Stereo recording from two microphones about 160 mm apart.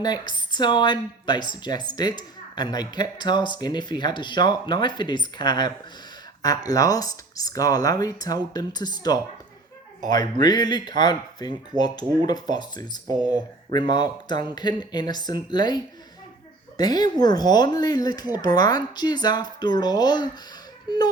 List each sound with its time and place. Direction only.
0.0 s speech: 25° left (ahead or behind)
13.1 s speech: 10° right (ahead or behind)
13.7 s speech: 25° left (ahead or behind)